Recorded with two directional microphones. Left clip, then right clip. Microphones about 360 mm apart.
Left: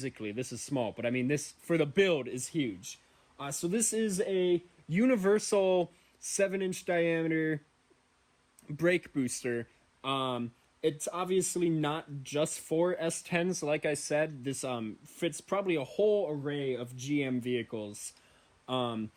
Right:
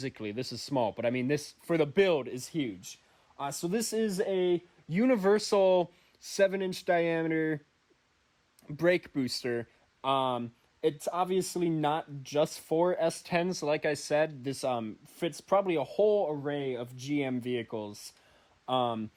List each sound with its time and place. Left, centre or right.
0.0 s speech: right
8.6 s speech: right